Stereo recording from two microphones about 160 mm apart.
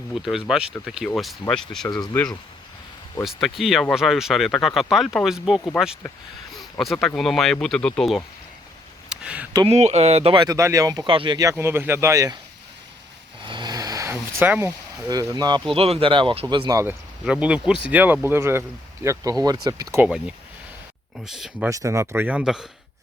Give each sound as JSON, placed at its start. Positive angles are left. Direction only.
{"t": 0.1, "sound": "speech", "side_deg": -5}
{"t": 3.2, "sound": "speech", "side_deg": 0}
{"t": 6.7, "sound": "speech", "side_deg": 0}
{"t": 9.0, "sound": "a sound", "side_deg": -5}
{"t": 9.6, "sound": "speech", "side_deg": -45}
{"t": 10.3, "sound": "speech", "side_deg": -25}
{"t": 13.4, "sound": "vehicle", "side_deg": -30}
{"t": 15.0, "sound": "speech", "side_deg": -20}
{"t": 15.7, "sound": "speech", "side_deg": -35}
{"t": 16.8, "sound": "speech", "side_deg": -5}
{"t": 20.0, "sound": "speech", "side_deg": -5}
{"t": 21.7, "sound": "speech", "side_deg": -20}